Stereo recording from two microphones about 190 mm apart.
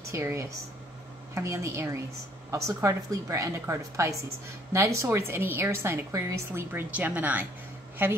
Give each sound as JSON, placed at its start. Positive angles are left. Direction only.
{"t": 0.1, "sound": "a woman's voice", "side_deg": -15}